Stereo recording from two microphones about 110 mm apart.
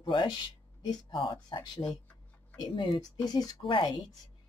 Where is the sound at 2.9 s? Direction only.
35° left (ahead or behind).